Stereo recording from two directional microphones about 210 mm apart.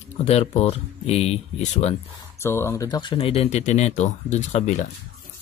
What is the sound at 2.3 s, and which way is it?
Speech, 10° left (ahead or behind).